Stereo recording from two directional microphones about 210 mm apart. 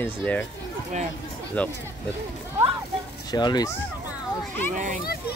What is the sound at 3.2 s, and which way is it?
Speech, 20° left (ahead or behind).